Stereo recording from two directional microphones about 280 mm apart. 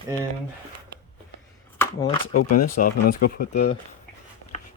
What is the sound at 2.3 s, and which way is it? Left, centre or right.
Speech, left.